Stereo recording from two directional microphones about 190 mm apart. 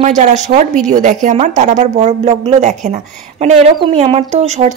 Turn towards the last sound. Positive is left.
turn(degrees=-35)  # may be behind; listen again after turning